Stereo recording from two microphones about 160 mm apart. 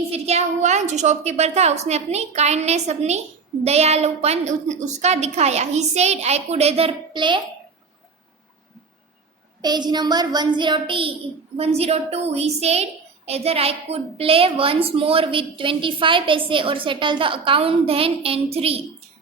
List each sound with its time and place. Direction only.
0.1 s a woman's voice: 45° right (ahead or behind)
9.6 s a child's voice: 25° right (ahead or behind)